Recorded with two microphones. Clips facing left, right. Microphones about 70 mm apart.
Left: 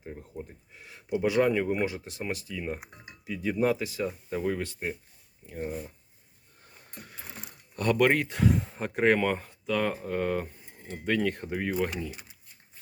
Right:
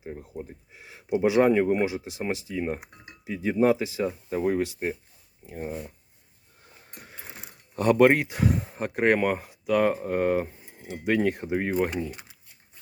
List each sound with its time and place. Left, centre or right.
0.0 s speech: centre
2.6 s speech: right
5.5 s speech: centre
7.0 s a sound: right
8.3 s speech: centre; by 11.6 s right
11.6 s speech: right